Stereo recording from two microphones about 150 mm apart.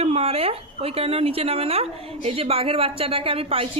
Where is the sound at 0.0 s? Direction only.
45° right (ahead or behind).